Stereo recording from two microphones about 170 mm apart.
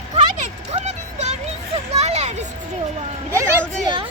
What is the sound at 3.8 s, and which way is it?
Speech, 30° right (ahead or behind).